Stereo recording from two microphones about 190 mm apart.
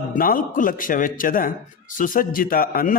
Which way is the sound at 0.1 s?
50° left (ahead or behind).